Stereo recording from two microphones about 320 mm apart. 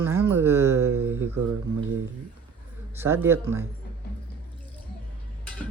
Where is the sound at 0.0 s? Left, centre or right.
Centre.